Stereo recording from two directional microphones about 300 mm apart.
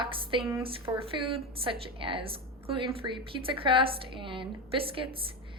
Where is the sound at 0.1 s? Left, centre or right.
Centre.